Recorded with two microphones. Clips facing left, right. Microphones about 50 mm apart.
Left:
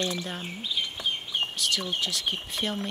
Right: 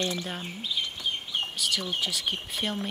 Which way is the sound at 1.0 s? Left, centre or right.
Left.